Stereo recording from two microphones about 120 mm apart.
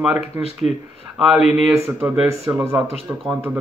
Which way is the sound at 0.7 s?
65° left (ahead or behind).